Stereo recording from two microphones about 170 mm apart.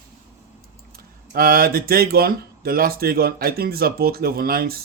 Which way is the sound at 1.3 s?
60° right (ahead or behind).